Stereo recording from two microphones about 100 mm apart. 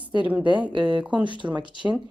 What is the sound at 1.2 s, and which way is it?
Speech, 55° right (ahead or behind).